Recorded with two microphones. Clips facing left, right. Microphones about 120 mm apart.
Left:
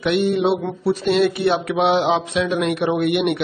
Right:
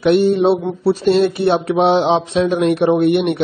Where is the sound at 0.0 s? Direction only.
35° right (ahead or behind).